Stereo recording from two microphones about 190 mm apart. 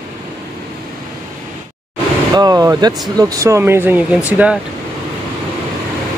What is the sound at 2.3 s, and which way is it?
Speech, 20° right (ahead or behind).